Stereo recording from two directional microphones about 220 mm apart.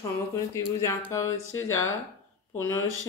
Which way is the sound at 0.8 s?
10° left (ahead or behind).